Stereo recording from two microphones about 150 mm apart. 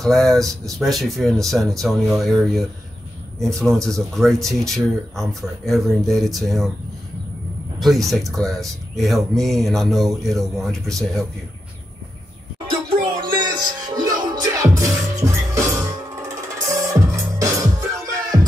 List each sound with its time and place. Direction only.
0.0 s speech: centre (ahead or behind)
7.8 s speech: centre (ahead or behind)
13.2 s music: 30° right (ahead or behind)